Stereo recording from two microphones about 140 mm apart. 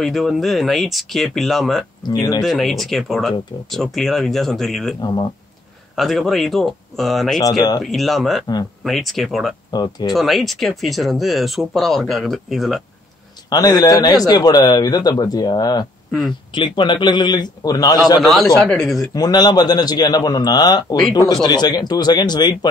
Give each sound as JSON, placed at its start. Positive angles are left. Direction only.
{"t": 0.0, "sound": "speech", "side_deg": 0}
{"t": 2.0, "sound": "speech", "side_deg": 30}
{"t": 2.4, "sound": "speech", "side_deg": 0}
{"t": 5.9, "sound": "speech", "side_deg": 0}
{"t": 9.7, "sound": "speech", "side_deg": 30}
{"t": 10.1, "sound": "speech", "side_deg": 0}
{"t": 13.5, "sound": "a man's voice", "side_deg": 25}
{"t": 18.2, "sound": "speech", "side_deg": 0}
{"t": 19.1, "sound": "speech", "side_deg": 30}